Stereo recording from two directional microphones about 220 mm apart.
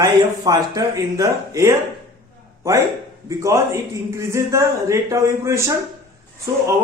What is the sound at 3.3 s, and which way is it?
A man's voice, 15° right (ahead or behind).